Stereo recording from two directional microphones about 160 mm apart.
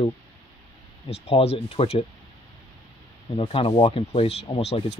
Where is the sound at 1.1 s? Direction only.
40° left (ahead or behind).